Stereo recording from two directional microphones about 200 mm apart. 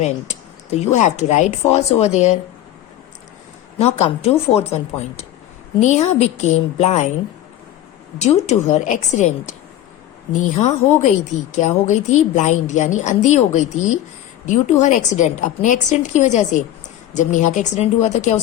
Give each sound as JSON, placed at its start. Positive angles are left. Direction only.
{"t": 0.0, "sound": "a woman's voice", "side_deg": 35}
{"t": 3.8, "sound": "a woman's voice", "side_deg": 35}
{"t": 8.2, "sound": "a woman's voice", "side_deg": 35}